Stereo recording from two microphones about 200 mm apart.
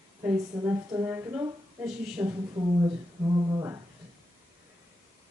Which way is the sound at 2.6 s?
20° right (ahead or behind).